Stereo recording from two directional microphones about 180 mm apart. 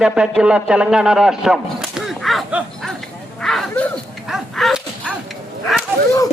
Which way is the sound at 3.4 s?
Centre (ahead or behind).